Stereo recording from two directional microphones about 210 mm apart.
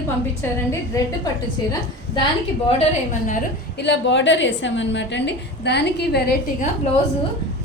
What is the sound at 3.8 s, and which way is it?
A woman's voice, 55° left (ahead or behind).